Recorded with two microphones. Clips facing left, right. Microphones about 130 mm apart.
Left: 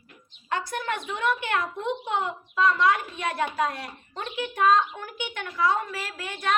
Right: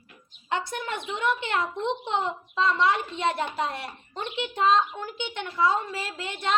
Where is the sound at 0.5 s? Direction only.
25° right (ahead or behind).